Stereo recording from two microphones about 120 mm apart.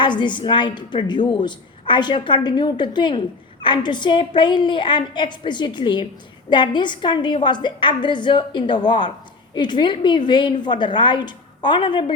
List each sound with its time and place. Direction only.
0.0 s a woman's voice: 40° left (ahead or behind)